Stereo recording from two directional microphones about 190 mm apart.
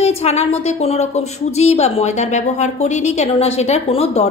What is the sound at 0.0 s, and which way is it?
Speech, 35° left (ahead or behind).